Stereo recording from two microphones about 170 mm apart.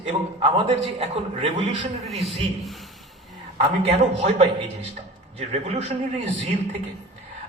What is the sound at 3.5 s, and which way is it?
A man's voice, 35° right (ahead or behind).